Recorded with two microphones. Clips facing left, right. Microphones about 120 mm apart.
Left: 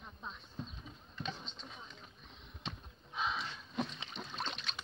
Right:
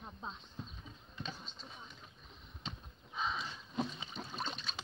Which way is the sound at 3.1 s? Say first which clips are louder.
Left 1 dB; centre (ahead or behind).